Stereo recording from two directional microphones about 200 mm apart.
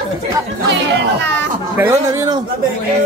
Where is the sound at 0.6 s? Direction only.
65° right (ahead or behind).